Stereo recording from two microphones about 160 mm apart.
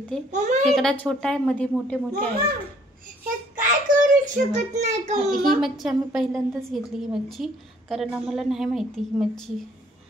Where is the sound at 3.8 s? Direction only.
50° right (ahead or behind).